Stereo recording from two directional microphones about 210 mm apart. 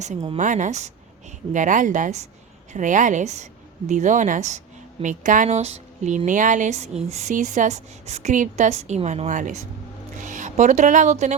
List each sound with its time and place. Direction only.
0.0 s a woman's voice: 30° right (ahead or behind)